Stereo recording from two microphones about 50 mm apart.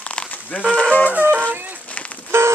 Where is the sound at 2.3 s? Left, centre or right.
Right.